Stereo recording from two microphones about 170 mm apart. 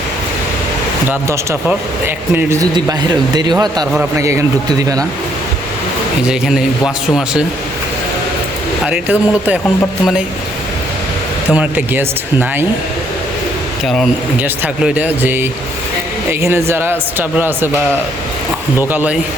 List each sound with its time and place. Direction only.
2.3 s speech: 15° right (ahead or behind)
4.2 s speech: 20° right (ahead or behind)
6.2 s a man's voice: 5° right (ahead or behind)
8.8 s speech: 5° right (ahead or behind)
11.5 s speech: 10° right (ahead or behind)
13.8 s a man's voice: centre (ahead or behind)
18.8 s speech: 10° right (ahead or behind)